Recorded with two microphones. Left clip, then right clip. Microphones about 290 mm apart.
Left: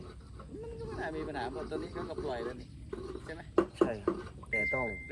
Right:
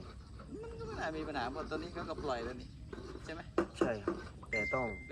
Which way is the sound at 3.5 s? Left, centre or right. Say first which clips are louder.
Left 6 dB; centre.